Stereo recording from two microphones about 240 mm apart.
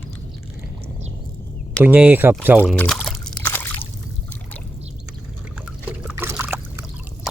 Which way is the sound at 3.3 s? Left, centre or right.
Centre.